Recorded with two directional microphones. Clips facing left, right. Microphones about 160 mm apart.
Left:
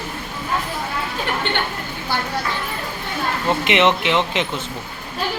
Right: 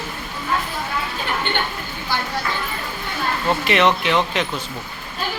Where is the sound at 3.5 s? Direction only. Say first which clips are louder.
Left 1 dB; 20° left (ahead or behind).